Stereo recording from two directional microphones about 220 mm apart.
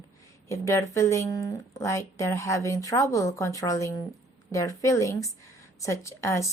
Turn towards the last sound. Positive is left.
turn(degrees=15)  # may be behind; listen again after turning